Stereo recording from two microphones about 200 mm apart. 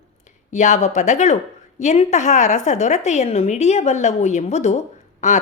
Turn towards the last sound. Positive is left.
turn(degrees=35)  # may be behind; listen again after turning